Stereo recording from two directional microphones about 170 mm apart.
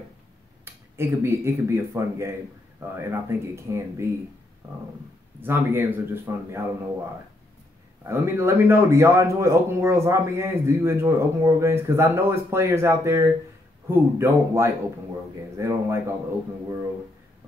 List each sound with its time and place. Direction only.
0.7 s speech: 15° right (ahead or behind)
5.4 s speech: 15° right (ahead or behind)
8.1 s speech: 15° right (ahead or behind)